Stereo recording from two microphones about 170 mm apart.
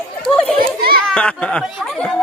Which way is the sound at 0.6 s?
60° right (ahead or behind).